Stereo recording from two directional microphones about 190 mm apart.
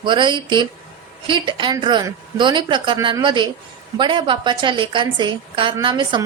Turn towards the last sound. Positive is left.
turn(degrees=-25)  # may be behind; listen again after turning